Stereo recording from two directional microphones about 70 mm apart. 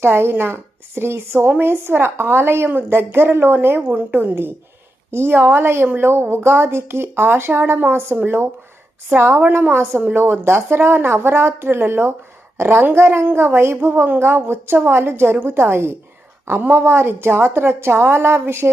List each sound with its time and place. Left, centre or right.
0.0 s speech: right